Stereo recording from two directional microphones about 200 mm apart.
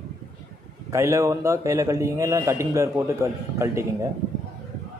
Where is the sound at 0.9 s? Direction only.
15° right (ahead or behind).